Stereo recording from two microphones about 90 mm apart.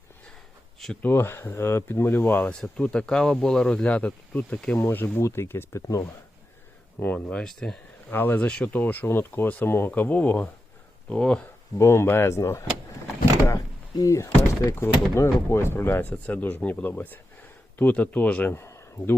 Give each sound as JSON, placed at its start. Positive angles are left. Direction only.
{"t": 1.0, "sound": "speech", "side_deg": 25}
{"t": 2.5, "sound": "speech", "side_deg": 10}
{"t": 7.0, "sound": "speech", "side_deg": 20}
{"t": 7.3, "sound": "speech", "side_deg": 5}
{"t": 8.1, "sound": "speech", "side_deg": 20}
{"t": 11.8, "sound": "speech", "side_deg": 30}
{"t": 13.9, "sound": "speech", "side_deg": 35}